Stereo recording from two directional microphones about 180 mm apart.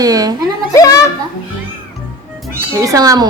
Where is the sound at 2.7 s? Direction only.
20° right (ahead or behind).